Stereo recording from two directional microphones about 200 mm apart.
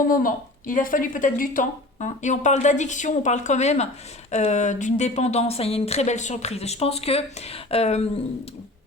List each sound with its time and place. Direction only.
0.0 s speech: 45° left (ahead or behind)